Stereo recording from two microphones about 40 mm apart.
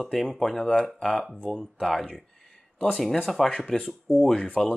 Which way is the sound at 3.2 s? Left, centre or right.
Centre.